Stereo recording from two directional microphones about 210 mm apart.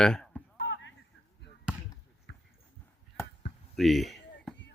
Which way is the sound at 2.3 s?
55° left (ahead or behind).